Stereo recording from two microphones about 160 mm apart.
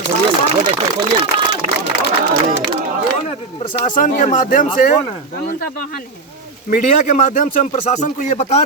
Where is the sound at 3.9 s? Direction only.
55° left (ahead or behind).